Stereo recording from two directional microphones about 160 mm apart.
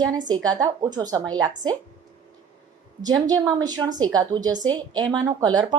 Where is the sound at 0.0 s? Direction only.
25° right (ahead or behind).